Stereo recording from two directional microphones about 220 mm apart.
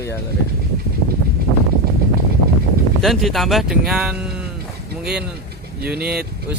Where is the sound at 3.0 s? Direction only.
Centre (ahead or behind).